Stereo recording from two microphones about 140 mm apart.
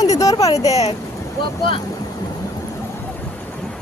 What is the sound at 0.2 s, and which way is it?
Speech, 25° left (ahead or behind).